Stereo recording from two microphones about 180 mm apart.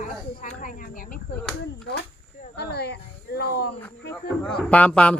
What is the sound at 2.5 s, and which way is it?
Speech, 65° left (ahead or behind).